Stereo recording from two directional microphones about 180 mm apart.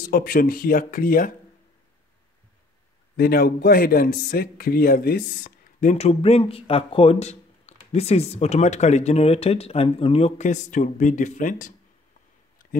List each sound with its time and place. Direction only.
0.0 s speech: 50° left (ahead or behind)
3.2 s speech: 55° left (ahead or behind)